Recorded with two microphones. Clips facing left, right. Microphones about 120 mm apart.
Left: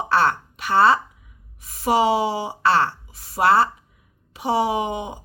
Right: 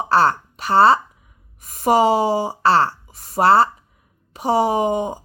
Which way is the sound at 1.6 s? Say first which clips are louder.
Right 3 dB; 45° right (ahead or behind).